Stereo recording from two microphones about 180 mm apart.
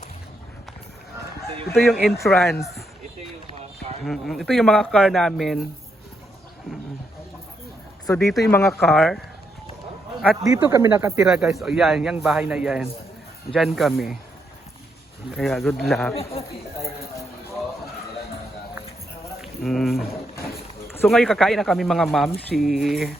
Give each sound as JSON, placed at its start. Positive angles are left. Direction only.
{"t": 1.7, "sound": "speech", "side_deg": 0}
{"t": 4.0, "sound": "speech", "side_deg": 0}
{"t": 8.0, "sound": "speech", "side_deg": 15}
{"t": 10.5, "sound": "speech", "side_deg": -15}
{"t": 11.3, "sound": "speech", "side_deg": -5}
{"t": 15.3, "sound": "speech", "side_deg": 0}
{"t": 19.4, "sound": "speech", "side_deg": 0}
{"t": 21.1, "sound": "speech", "side_deg": 0}